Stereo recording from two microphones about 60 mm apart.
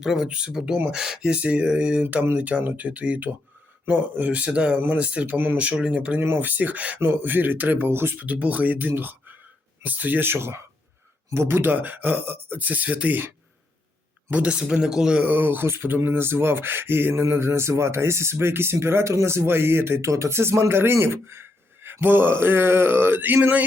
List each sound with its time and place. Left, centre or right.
0.0 s speech: centre; by 7.0 s right
7.0 s speech: right
8.2 s speech: right; by 15.2 s centre
15.2 s speech: right
20.1 s speech: right